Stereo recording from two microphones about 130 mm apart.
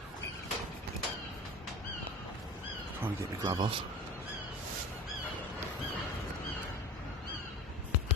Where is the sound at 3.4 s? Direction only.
35° right (ahead or behind).